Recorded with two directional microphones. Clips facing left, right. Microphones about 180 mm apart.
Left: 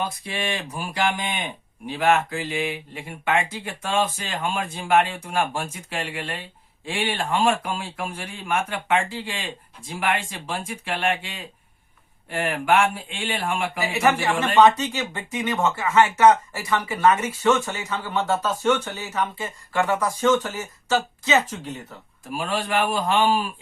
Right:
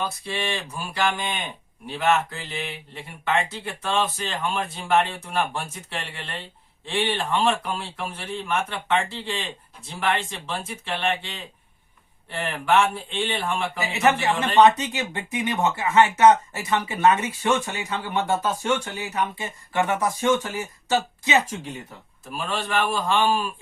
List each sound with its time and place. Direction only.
0.0 s speech: 10° left (ahead or behind)
13.9 s speech: 20° right (ahead or behind)
22.4 s speech: 10° left (ahead or behind)